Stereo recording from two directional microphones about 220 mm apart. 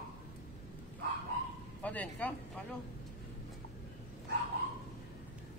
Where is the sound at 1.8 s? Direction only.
5° left (ahead or behind).